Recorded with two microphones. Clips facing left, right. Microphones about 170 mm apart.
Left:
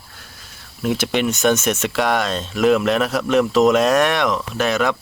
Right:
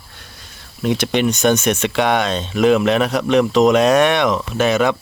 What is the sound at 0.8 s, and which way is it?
Speech, centre (ahead or behind).